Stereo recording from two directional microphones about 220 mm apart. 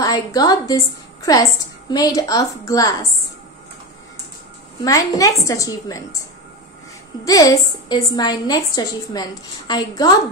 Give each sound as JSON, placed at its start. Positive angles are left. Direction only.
{"t": 0.0, "sound": "a woman's voice", "side_deg": 15}
{"t": 4.8, "sound": "a woman's voice", "side_deg": 15}
{"t": 7.2, "sound": "a woman's voice", "side_deg": 15}